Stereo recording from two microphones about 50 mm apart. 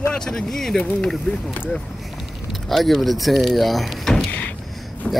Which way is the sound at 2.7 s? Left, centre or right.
Centre.